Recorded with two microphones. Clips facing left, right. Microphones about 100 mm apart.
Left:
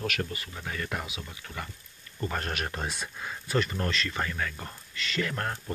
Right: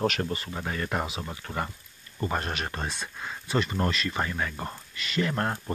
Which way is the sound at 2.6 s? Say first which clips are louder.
Right 1 dB; 5° left (ahead or behind).